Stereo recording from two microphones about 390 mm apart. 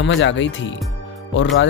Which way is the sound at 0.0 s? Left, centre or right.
Left.